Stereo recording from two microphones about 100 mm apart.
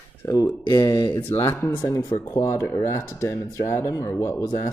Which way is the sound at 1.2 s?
25° left (ahead or behind).